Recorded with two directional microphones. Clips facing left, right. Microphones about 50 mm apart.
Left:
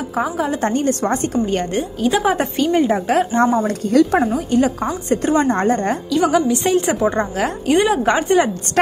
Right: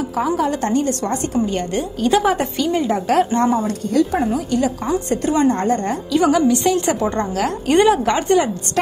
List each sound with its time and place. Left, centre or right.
0.2 s speech: centre
0.6 s a woman's voice: left
2.0 s a woman's voice: centre
2.3 s a woman's voice: left
6.1 s a woman's voice: centre
6.5 s a woman's voice: left
6.9 s speech: centre
7.6 s a woman's voice: centre
8.0 s a woman's voice: left